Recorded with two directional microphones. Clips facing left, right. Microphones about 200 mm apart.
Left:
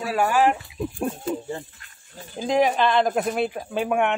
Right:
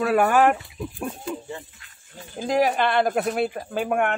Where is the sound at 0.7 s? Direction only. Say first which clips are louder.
Left 4 dB; 25° left (ahead or behind).